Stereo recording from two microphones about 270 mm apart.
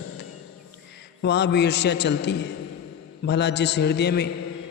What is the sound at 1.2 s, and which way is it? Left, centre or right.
A man's voice, left.